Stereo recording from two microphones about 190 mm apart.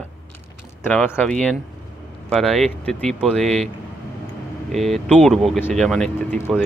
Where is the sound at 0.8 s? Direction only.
10° left (ahead or behind).